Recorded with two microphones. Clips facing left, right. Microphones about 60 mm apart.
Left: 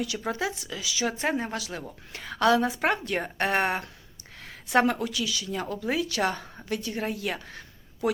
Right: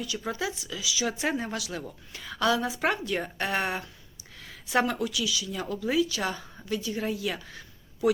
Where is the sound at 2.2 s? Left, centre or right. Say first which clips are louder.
Left 4 dB; left.